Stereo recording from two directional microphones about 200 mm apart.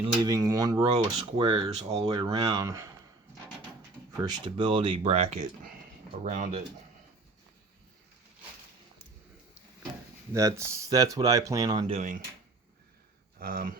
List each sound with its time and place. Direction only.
0.0 s speech: 20° right (ahead or behind)
4.2 s speech: 25° right (ahead or behind); by 6.6 s 40° right (ahead or behind)
10.3 s speech: 15° right (ahead or behind); by 12.2 s 35° right (ahead or behind)
13.4 s speech: 45° right (ahead or behind)